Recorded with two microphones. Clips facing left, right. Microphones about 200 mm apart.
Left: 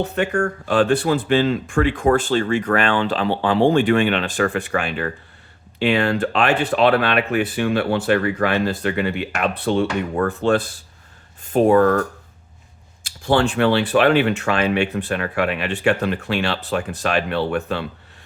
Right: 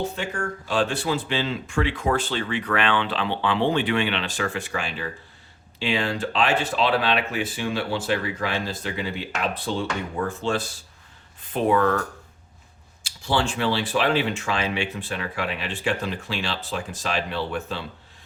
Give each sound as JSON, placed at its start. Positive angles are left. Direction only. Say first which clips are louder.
{"t": 0.0, "sound": "speech", "louder": "left 8 dB", "side_deg": 65}
{"t": 11.5, "sound": "speech", "louder": "left 7 dB", "side_deg": 45}
{"t": 13.0, "sound": "speech", "louder": "left 7 dB", "side_deg": 55}